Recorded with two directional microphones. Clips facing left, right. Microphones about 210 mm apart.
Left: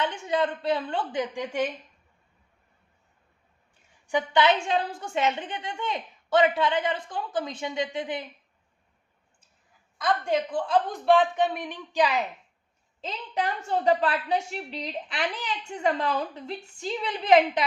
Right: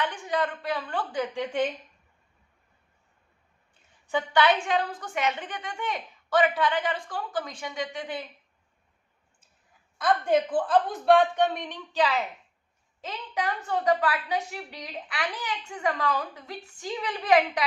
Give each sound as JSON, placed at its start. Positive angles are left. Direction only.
{"t": 0.0, "sound": "a woman's voice", "side_deg": 25}
{"t": 4.0, "sound": "a woman's voice", "side_deg": 20}
{"t": 11.0, "sound": "speech", "side_deg": 0}
{"t": 13.1, "sound": "a woman's voice", "side_deg": 25}